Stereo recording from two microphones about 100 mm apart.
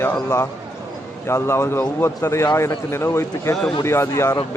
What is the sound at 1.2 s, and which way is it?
Speech, 25° left (ahead or behind).